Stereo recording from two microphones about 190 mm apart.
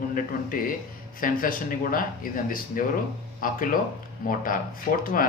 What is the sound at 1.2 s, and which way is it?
Speech, 45° left (ahead or behind).